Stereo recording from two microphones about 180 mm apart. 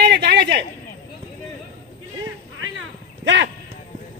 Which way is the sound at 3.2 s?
80° right.